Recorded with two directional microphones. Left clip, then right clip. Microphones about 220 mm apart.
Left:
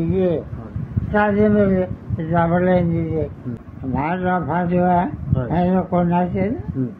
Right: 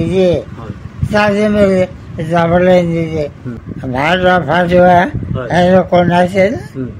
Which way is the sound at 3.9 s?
50° right (ahead or behind).